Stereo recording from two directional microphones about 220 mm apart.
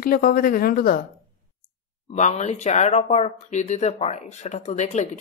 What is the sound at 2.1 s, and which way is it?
Speech, 30° left (ahead or behind).